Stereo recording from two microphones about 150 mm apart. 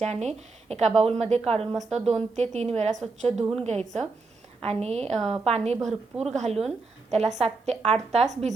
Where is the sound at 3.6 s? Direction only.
50° right (ahead or behind).